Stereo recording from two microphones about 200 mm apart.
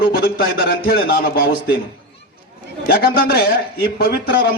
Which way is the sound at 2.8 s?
50° left (ahead or behind).